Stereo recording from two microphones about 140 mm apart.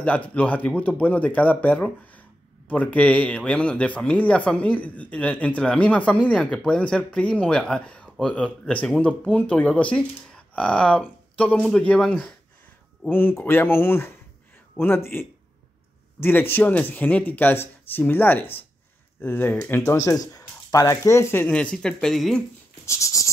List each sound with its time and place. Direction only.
0.0 s speech: 10° left (ahead or behind)
22.8 s writing: 20° left (ahead or behind)